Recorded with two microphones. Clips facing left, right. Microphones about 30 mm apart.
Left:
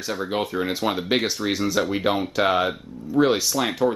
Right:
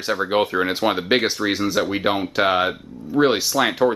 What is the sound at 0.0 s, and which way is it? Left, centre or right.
Speech, right.